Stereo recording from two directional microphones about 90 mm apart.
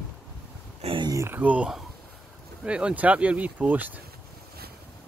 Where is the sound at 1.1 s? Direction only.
30° right (ahead or behind).